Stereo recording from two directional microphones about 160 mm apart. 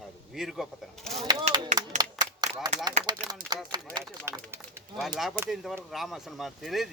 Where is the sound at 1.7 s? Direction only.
25° right (ahead or behind).